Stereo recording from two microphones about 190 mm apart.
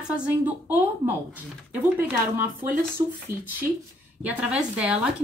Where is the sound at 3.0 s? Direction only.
20° right (ahead or behind).